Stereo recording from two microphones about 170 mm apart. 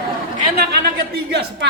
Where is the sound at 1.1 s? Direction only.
80° right.